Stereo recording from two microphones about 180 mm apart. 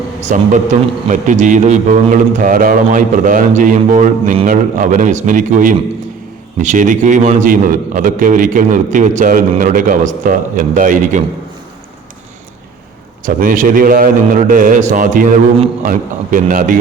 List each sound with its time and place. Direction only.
0.2 s a man's voice: 40° right (ahead or behind)
7.4 s a man's voice: 50° right (ahead or behind)
13.2 s a man's voice: 50° right (ahead or behind)